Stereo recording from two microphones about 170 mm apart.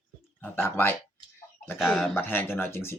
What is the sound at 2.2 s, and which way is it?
Speech, 10° left (ahead or behind).